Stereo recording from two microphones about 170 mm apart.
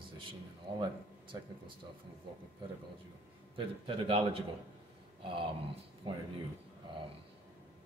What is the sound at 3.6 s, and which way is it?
Speech, 30° right (ahead or behind).